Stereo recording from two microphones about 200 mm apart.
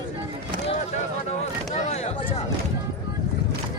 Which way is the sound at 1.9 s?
35° left (ahead or behind).